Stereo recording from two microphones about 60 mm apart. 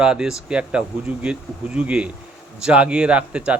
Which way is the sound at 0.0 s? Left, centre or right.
Centre.